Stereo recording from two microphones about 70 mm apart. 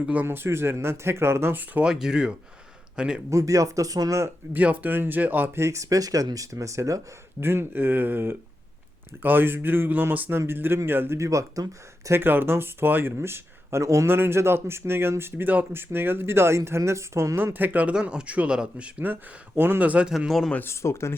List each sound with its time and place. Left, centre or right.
0.0 s speech: right
0.3 s speech: right
1.8 s a man's voice: centre
3.2 s speech: right
4.5 s speech: right
5.5 s speech: right
7.4 s speech: right
11.2 s speech: right
12.0 s speech: right
14.1 s a man's voice: right; by 18.9 s centre
18.9 s speech: right
19.9 s a man's voice: centre
20.7 s speech: left